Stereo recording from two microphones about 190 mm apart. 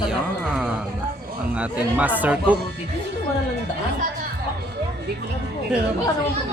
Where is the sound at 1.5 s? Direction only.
5° right (ahead or behind).